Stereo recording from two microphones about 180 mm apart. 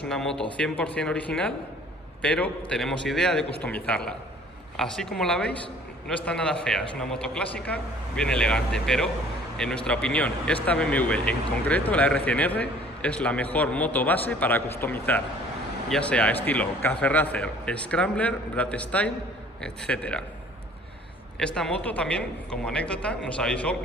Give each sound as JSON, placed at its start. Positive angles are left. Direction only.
{"t": 0.1, "sound": "speech", "side_deg": 5}
{"t": 21.4, "sound": "speech", "side_deg": 5}